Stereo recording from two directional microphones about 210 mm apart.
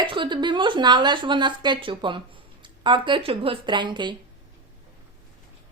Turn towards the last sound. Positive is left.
turn(degrees=-20)  # may be behind; listen again after turning